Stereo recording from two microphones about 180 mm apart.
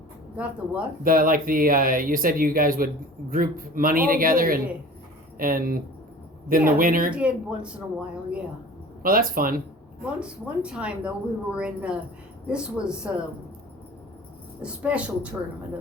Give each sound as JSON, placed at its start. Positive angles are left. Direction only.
{"t": 0.3, "sound": "speech", "side_deg": -5}
{"t": 1.0, "sound": "speech", "side_deg": -50}
{"t": 7.1, "sound": "speech", "side_deg": -5}
{"t": 9.0, "sound": "speech", "side_deg": -55}
{"t": 10.2, "sound": "speech", "side_deg": -5}
{"t": 14.6, "sound": "speech", "side_deg": -5}